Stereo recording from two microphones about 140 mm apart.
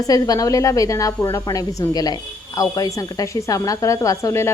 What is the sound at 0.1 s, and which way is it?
A woman's voice, 25° left (ahead or behind).